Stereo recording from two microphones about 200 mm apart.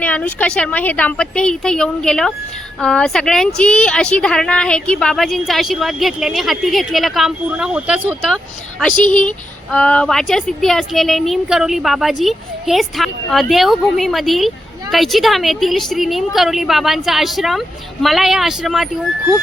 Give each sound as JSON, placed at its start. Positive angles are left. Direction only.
{"t": 0.0, "sound": "speech", "side_deg": 10}
{"t": 9.0, "sound": "speech", "side_deg": -25}
{"t": 9.7, "sound": "speech", "side_deg": 5}